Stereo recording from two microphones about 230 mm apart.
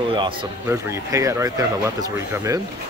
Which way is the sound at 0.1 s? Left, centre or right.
Right.